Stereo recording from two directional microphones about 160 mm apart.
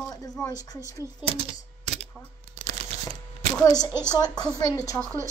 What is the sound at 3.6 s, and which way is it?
Speech, 25° left (ahead or behind).